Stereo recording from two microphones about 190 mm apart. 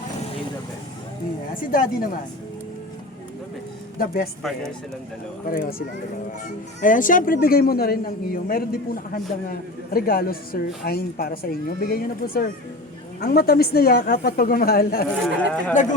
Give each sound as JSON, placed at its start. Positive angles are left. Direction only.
{"t": 1.7, "sound": "a man's voice", "side_deg": 50}
{"t": 3.9, "sound": "speech", "side_deg": 50}
{"t": 5.5, "sound": "a man's voice", "side_deg": 50}
{"t": 6.8, "sound": "a man's voice", "side_deg": 45}
{"t": 15.4, "sound": "speech", "side_deg": 5}
{"t": 15.7, "sound": "speech", "side_deg": 40}